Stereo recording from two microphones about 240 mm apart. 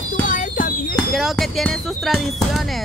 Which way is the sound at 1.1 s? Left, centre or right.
Centre.